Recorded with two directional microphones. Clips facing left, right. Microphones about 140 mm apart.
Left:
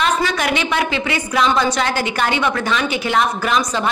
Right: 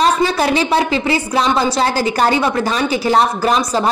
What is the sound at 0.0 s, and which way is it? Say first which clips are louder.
A woman's voice: right 4 dB; 30° right (ahead or behind).